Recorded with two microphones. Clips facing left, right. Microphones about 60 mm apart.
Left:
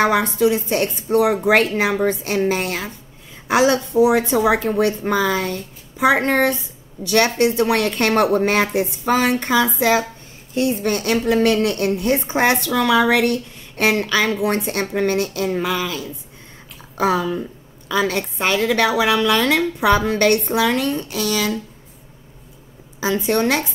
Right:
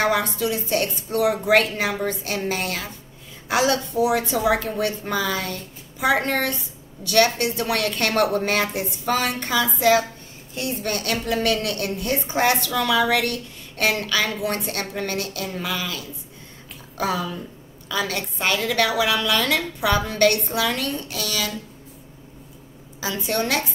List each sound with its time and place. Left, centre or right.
0.1 s a woman's voice: left
22.9 s a woman's voice: left